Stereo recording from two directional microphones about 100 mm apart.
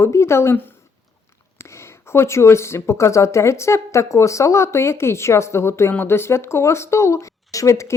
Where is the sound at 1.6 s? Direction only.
25° left (ahead or behind).